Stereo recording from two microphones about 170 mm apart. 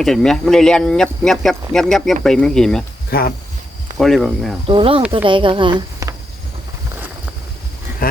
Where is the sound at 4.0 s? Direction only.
Centre (ahead or behind).